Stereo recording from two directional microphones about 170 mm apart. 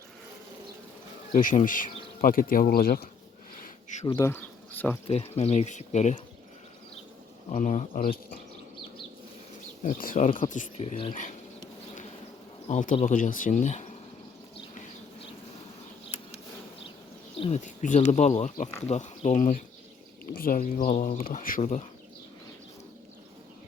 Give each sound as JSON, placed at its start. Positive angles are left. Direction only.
{"t": 1.3, "sound": "speech", "side_deg": 50}
{"t": 4.0, "sound": "speech", "side_deg": 25}
{"t": 4.3, "sound": "speech", "side_deg": 10}
{"t": 5.0, "sound": "speech", "side_deg": 35}
{"t": 7.5, "sound": "speech", "side_deg": 45}
{"t": 9.8, "sound": "speech", "side_deg": 50}
{"t": 11.1, "sound": "speech", "side_deg": 50}
{"t": 12.6, "sound": "speech", "side_deg": 50}
{"t": 17.3, "sound": "speech", "side_deg": 35}
{"t": 20.2, "sound": "speech", "side_deg": 60}